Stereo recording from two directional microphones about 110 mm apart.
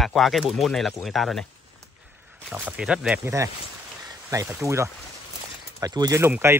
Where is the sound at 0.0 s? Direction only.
Centre (ahead or behind).